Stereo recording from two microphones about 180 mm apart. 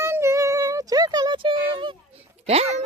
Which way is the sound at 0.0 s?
15° right (ahead or behind).